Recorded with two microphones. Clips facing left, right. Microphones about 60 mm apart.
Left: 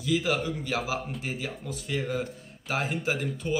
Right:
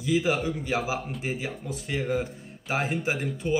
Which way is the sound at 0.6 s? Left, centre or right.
Centre.